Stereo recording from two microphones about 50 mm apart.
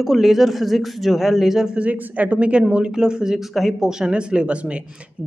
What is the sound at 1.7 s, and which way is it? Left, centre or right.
A woman's voice, right.